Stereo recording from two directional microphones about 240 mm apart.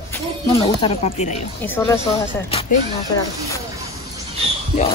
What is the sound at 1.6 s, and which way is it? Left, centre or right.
Speech, centre.